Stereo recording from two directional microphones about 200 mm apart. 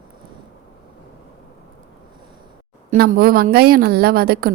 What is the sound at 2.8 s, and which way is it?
A woman's voice, 50° right (ahead or behind).